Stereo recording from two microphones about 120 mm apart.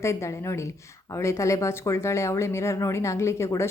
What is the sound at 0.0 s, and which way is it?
Speech, 25° left (ahead or behind).